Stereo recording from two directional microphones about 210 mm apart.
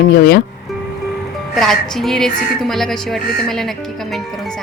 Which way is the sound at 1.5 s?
Centre (ahead or behind).